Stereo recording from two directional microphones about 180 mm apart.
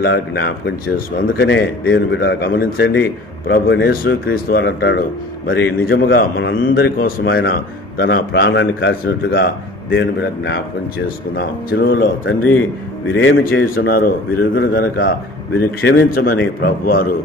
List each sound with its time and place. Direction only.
0.0 s a man's voice: 70° left (ahead or behind)
6.7 s a man's voice: 55° left (ahead or behind)
8.0 s a man's voice: 70° left (ahead or behind)
11.3 s a man's voice: 65° left (ahead or behind)
13.1 s a man's voice: 90° left
13.5 s a man's voice: 60° left (ahead or behind)